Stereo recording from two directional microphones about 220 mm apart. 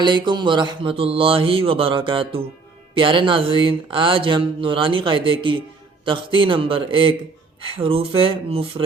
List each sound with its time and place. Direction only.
0.0 s speech: 20° right (ahead or behind)